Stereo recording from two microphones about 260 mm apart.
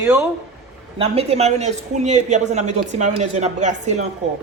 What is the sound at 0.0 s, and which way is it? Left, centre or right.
Speech, centre.